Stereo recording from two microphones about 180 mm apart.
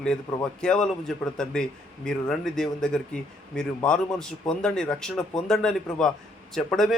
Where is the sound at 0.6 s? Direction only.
5° left (ahead or behind).